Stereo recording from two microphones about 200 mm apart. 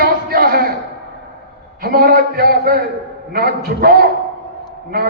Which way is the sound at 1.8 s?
50° right (ahead or behind).